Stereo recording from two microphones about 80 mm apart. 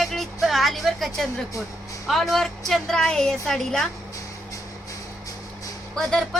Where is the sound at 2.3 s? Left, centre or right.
Centre.